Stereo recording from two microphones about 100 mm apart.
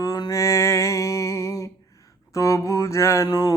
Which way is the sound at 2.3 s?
30° left (ahead or behind).